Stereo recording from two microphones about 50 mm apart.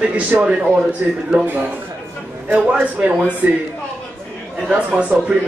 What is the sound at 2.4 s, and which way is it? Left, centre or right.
A man's voice, right.